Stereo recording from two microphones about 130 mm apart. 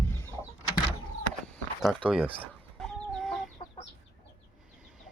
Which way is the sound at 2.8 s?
Centre (ahead or behind).